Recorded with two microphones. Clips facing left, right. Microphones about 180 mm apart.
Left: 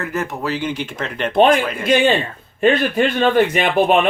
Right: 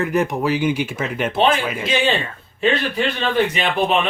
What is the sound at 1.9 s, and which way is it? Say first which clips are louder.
Speech: left 6 dB; 55° left (ahead or behind).